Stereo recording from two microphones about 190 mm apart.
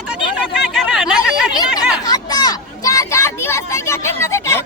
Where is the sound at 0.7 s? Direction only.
5° right (ahead or behind).